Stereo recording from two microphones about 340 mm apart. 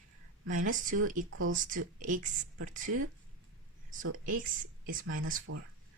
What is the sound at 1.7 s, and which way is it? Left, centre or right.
Speech, right.